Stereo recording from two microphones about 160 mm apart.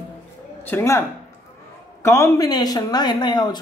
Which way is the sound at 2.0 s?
15° left (ahead or behind).